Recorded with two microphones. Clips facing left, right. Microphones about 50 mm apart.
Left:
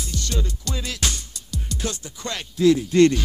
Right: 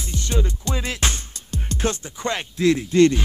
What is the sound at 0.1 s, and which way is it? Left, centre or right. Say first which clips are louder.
Music: right 5 dB; right.